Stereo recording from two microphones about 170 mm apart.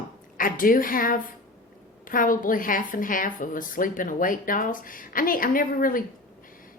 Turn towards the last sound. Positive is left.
turn(degrees=55)  # may be behind; listen again after turning